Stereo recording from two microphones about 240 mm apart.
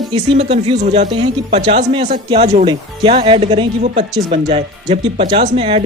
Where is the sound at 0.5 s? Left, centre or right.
Right.